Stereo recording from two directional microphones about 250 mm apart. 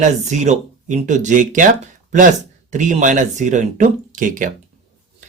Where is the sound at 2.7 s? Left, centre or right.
Right.